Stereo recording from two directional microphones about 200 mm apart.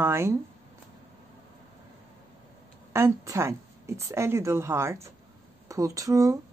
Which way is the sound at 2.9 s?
15° right (ahead or behind).